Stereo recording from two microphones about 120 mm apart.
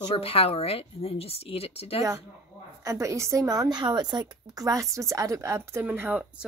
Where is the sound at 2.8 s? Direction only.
25° right (ahead or behind); by 6.5 s 10° right (ahead or behind).